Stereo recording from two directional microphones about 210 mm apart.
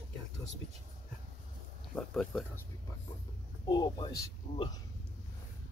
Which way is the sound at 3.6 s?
20° left (ahead or behind).